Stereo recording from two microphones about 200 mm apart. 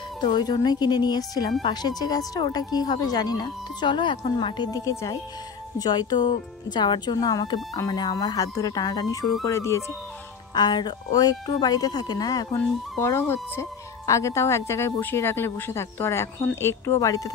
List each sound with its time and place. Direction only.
0.2 s speech: 20° left (ahead or behind)